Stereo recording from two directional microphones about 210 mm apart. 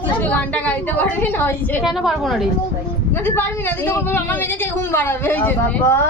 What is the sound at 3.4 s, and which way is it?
Speech, 10° left (ahead or behind).